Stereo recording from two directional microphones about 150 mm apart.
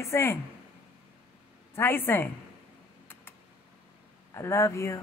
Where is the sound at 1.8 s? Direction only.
15° left (ahead or behind).